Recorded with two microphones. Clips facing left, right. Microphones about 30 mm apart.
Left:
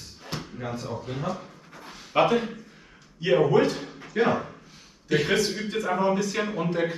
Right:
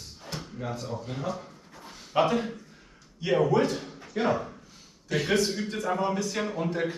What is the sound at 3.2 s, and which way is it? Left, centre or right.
A man's voice, left.